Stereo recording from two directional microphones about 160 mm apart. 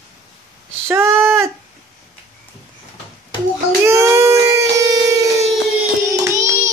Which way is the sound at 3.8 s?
15° right (ahead or behind).